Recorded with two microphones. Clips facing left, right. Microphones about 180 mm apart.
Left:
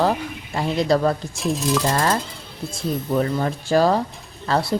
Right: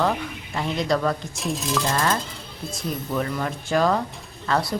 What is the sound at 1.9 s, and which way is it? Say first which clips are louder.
Speech: left 3 dB; 35° left (ahead or behind).